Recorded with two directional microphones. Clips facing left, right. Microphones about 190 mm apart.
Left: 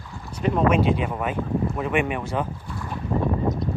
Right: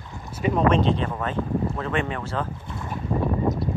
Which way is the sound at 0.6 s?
10° left (ahead or behind).